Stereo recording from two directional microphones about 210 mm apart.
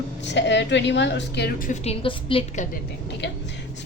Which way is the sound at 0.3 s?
55° left (ahead or behind).